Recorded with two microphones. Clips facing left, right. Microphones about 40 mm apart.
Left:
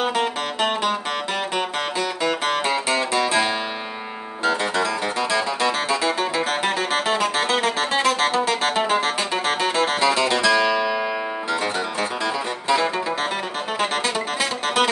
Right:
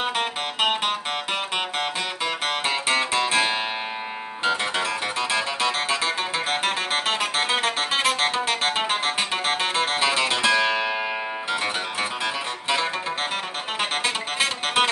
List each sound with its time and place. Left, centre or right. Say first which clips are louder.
0.1 s music: left 3 dB; right
2.6 s music: left 1 dB; right
5.3 s music: left 2 dB; right
12.6 s music: left 4 dB; right